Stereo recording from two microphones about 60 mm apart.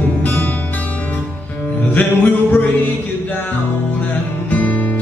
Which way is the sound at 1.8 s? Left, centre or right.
Left.